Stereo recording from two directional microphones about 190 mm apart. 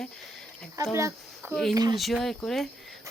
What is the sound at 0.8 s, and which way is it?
Speech, 20° right (ahead or behind).